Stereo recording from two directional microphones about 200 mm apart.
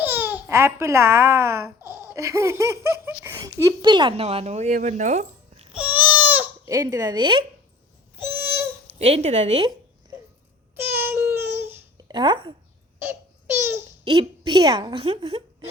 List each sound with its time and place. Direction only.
0.0 s a child's voice: 10° right (ahead or behind); by 5.6 s 35° right (ahead or behind)
5.7 s baby cry: 10° right (ahead or behind); by 7.4 s 25° right (ahead or behind)
8.3 s a sound: 10° right (ahead or behind)
9.0 s speech: 30° right (ahead or behind)
10.9 s babbling: 10° right (ahead or behind)
13.1 s babbling: 10° right (ahead or behind)
14.0 s a woman's voice: 20° right (ahead or behind)